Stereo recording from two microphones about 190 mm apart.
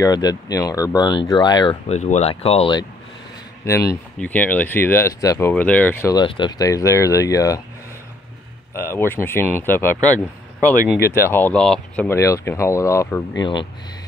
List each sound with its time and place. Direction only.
0.0 s speech: 20° left (ahead or behind)
1.9 s speech: 35° left (ahead or behind)
4.2 s speech: 10° left (ahead or behind)
6.1 s speech: 25° left (ahead or behind)
8.7 s speech: 15° left (ahead or behind)
10.8 s speech: 55° left (ahead or behind)
11.2 s speech: 10° left (ahead or behind)